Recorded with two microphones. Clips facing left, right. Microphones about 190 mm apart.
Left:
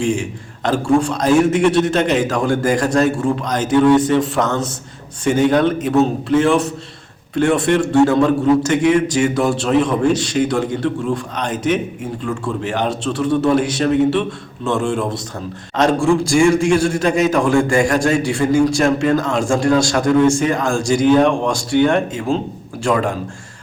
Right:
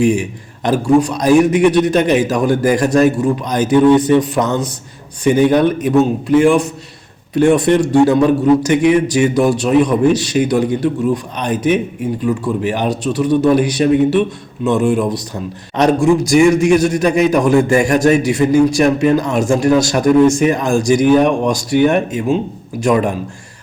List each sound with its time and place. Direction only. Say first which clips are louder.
0.6 s a man's voice: right 3 dB; 20° right (ahead or behind)